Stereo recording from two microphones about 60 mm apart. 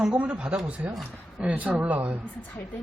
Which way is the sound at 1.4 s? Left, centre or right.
Right.